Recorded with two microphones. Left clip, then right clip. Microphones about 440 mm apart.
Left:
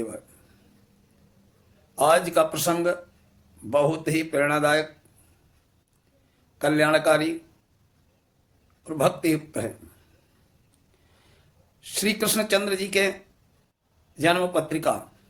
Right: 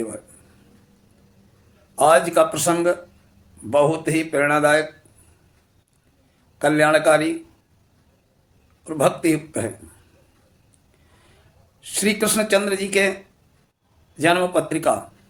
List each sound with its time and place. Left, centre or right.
2.0 s speech: left
6.6 s speech: left
8.8 s speech: left
11.8 s speech: left
14.2 s speech: left